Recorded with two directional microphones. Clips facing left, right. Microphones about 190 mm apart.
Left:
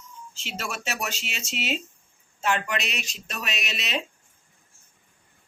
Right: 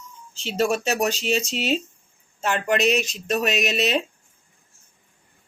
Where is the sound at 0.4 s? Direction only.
35° right (ahead or behind).